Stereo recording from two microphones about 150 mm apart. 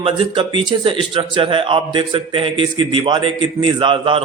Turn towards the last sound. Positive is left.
turn(degrees=-35)  # may be behind; listen again after turning